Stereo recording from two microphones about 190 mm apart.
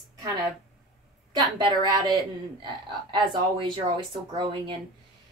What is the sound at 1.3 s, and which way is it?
Speech, 20° right (ahead or behind).